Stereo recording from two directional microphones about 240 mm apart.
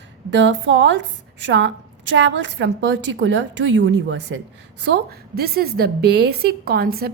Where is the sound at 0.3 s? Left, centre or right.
Right.